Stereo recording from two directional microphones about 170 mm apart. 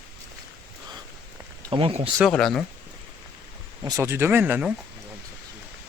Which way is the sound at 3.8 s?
15° right (ahead or behind).